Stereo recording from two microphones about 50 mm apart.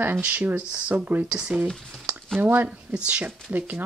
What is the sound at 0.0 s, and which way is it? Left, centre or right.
Speech, right.